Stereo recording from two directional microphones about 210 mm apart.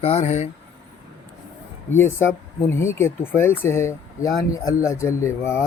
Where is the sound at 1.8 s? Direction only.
10° left (ahead or behind).